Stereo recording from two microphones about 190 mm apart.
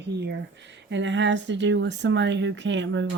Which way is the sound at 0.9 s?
75° right (ahead or behind).